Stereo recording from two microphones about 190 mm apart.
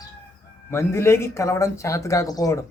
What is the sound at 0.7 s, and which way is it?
A man's voice, 15° left (ahead or behind).